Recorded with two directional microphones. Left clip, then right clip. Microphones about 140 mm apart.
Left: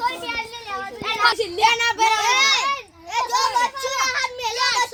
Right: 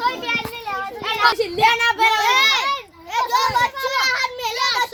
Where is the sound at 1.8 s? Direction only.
5° right (ahead or behind).